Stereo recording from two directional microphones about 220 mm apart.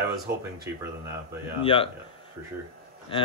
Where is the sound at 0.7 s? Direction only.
10° right (ahead or behind).